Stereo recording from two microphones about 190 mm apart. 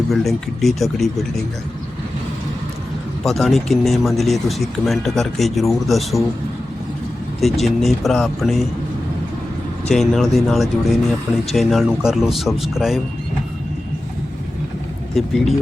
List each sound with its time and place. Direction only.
0.1 s speech: centre (ahead or behind)
3.2 s speech: centre (ahead or behind)
7.4 s speech: centre (ahead or behind)
9.9 s speech: centre (ahead or behind)
15.1 s speech: centre (ahead or behind)